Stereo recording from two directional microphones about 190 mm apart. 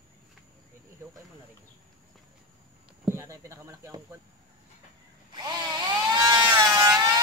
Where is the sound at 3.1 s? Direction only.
15° right (ahead or behind).